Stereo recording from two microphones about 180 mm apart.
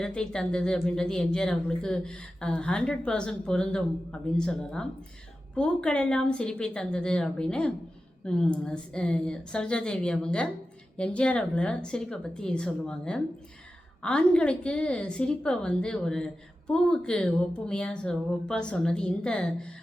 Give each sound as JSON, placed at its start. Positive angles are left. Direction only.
{"t": 0.0, "sound": "speech", "side_deg": 5}